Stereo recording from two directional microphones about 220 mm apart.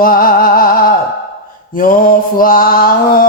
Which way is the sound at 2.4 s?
40° left (ahead or behind).